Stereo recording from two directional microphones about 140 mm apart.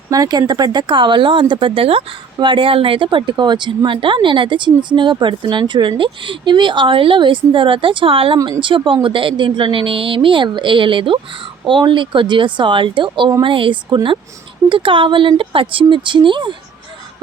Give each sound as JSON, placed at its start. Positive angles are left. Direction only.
{"t": 0.1, "sound": "speech", "side_deg": -25}